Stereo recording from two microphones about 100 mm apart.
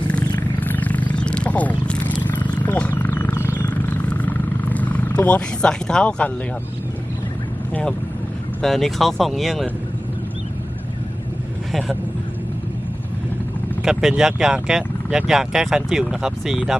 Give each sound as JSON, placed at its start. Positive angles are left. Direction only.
{"t": 0.1, "sound": "wild animals", "side_deg": 15}
{"t": 3.1, "sound": "wild animals", "side_deg": 25}
{"t": 7.7, "sound": "speech", "side_deg": 10}
{"t": 11.7, "sound": "speech", "side_deg": 0}
{"t": 13.8, "sound": "speech", "side_deg": -5}